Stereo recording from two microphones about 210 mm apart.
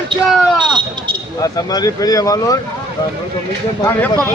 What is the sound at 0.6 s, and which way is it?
Speech, 20° right (ahead or behind).